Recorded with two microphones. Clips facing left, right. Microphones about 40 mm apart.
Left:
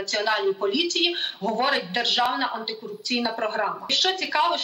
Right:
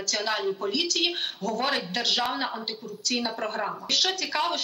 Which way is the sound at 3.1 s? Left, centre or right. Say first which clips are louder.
Left 5 dB; centre.